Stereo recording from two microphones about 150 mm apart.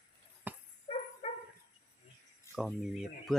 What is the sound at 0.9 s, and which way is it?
Dog, 35° left (ahead or behind).